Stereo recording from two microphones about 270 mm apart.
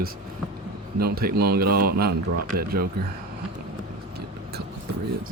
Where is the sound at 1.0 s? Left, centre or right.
Right.